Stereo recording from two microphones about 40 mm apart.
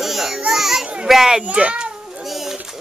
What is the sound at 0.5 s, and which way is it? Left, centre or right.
Children playing, centre.